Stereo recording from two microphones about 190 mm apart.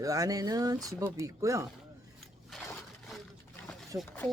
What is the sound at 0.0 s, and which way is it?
Speech, 20° right (ahead or behind).